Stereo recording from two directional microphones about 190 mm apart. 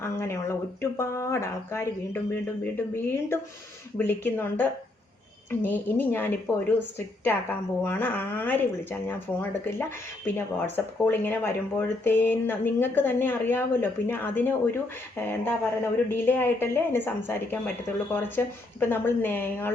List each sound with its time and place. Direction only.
0.0 s a woman's voice: 15° left (ahead or behind)
7.9 s a woman's voice: 10° left (ahead or behind)